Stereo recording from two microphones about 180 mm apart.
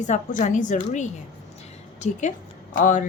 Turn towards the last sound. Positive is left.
turn(degrees=45)  # may be behind; listen again after turning